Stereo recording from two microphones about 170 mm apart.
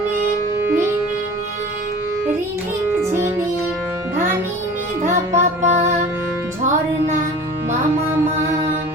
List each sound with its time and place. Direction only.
5.0 s music: 45° right (ahead or behind)